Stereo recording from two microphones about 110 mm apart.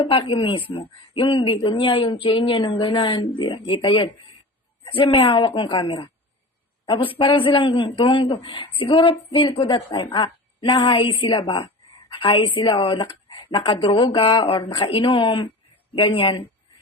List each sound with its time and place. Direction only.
0.0 s a woman's voice: 55° left (ahead or behind)